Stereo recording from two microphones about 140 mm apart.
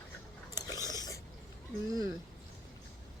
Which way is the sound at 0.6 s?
30° left (ahead or behind).